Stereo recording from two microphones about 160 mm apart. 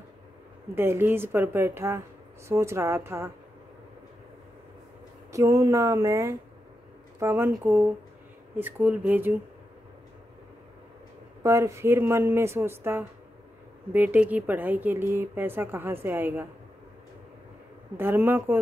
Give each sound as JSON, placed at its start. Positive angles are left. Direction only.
{"t": 0.7, "sound": "speech", "side_deg": -15}
{"t": 5.3, "sound": "speech", "side_deg": -20}
{"t": 11.4, "sound": "speech", "side_deg": -20}
{"t": 17.9, "sound": "speech", "side_deg": -15}